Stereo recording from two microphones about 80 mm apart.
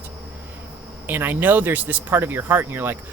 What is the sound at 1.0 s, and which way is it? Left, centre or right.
Speech, right.